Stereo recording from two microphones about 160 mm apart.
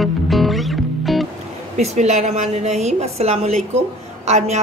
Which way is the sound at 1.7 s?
45° right (ahead or behind).